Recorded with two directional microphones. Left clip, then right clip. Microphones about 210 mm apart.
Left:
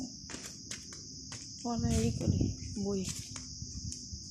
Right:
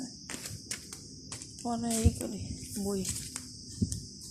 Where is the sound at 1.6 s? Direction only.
Centre (ahead or behind).